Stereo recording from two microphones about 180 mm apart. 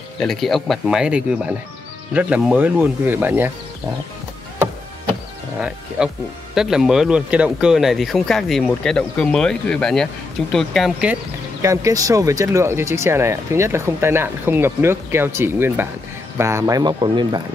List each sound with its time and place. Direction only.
0.2 s speech: centre (ahead or behind)
6.0 s speech: 5° right (ahead or behind)
11.6 s speech: 15° right (ahead or behind)